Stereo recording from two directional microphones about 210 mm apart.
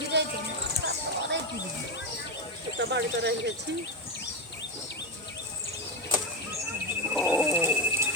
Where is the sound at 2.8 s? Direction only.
55° right (ahead or behind).